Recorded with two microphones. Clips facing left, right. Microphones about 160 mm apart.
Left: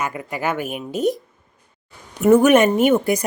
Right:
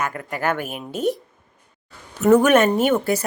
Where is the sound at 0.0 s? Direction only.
10° left (ahead or behind).